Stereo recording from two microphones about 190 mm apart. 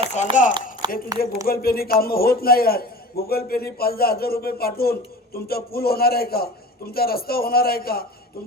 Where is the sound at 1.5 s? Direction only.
50° left (ahead or behind).